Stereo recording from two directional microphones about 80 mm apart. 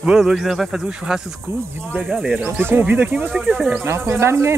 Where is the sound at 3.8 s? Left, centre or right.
Right.